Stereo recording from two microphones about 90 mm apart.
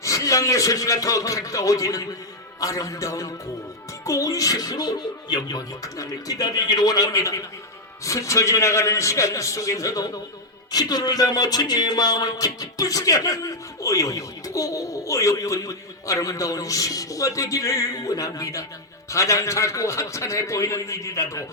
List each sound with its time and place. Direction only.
0.0 s speech: 35° left (ahead or behind)